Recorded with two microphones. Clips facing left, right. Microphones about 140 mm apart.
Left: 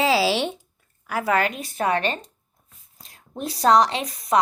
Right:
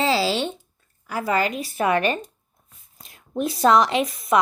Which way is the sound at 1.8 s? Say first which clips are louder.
Right 2 dB; 35° left (ahead or behind).